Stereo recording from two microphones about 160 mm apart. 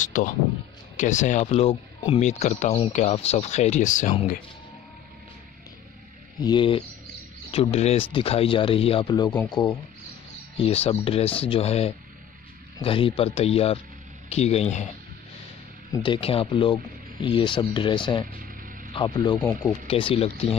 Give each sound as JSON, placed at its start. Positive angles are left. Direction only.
{"t": 0.0, "sound": "speech", "side_deg": 50}
{"t": 6.4, "sound": "speech", "side_deg": 30}
{"t": 9.1, "sound": "speech", "side_deg": 25}
{"t": 10.6, "sound": "speech", "side_deg": 40}
{"t": 15.9, "sound": "speech", "side_deg": 30}